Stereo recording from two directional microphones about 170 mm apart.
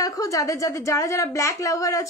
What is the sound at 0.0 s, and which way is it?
A woman's voice, 20° left (ahead or behind).